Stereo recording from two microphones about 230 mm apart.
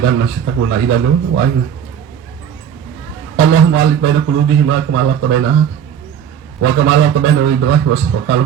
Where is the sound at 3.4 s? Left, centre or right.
Right.